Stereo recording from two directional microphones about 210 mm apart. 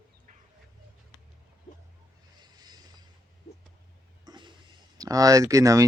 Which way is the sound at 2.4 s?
20° right (ahead or behind).